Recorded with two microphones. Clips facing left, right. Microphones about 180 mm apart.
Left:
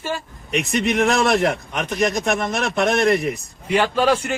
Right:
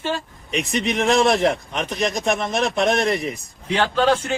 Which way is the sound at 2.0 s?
Centre (ahead or behind).